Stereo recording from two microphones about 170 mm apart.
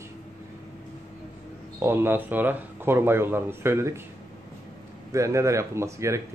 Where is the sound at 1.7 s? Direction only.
15° right (ahead or behind).